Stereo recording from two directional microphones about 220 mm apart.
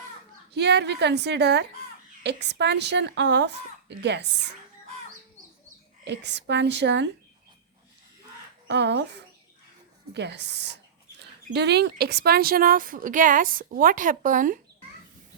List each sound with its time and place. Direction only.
0.5 s a woman's voice: 50° right (ahead or behind)
6.1 s a woman's voice: 50° right (ahead or behind)
8.6 s a woman's voice: 55° right (ahead or behind)